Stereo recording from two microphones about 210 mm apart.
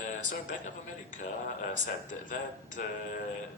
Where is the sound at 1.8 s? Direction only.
40° left (ahead or behind).